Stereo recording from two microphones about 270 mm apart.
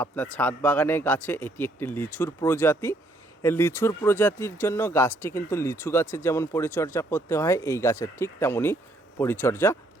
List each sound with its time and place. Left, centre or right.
0.0 s speech: centre